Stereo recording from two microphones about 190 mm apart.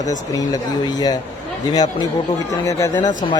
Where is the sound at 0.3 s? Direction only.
20° left (ahead or behind).